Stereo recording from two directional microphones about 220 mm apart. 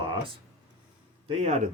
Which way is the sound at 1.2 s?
30° right (ahead or behind).